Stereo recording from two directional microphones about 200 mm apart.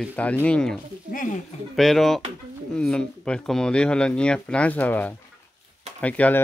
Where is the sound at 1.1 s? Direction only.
45° left (ahead or behind).